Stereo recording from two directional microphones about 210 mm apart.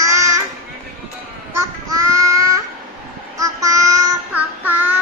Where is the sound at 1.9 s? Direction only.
15° right (ahead or behind).